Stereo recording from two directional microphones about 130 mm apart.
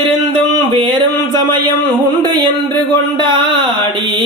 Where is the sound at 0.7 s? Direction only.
40° right (ahead or behind).